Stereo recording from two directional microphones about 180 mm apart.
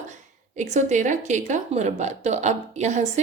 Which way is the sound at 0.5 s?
40° right (ahead or behind).